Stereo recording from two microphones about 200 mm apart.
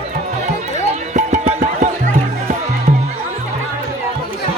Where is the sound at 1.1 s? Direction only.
35° right (ahead or behind).